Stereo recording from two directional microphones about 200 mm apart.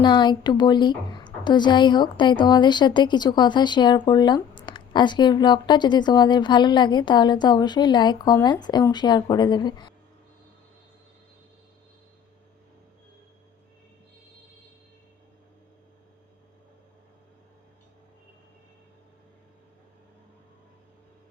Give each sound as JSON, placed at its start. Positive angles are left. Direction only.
{"t": 0.0, "sound": "a woman's voice", "side_deg": 25}